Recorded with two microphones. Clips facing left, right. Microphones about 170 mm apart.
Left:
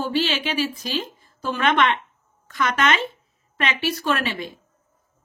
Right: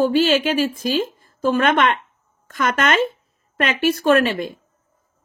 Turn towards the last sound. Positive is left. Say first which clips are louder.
# right 8 dB
turn(degrees=-50)  # may be behind; listen again after turning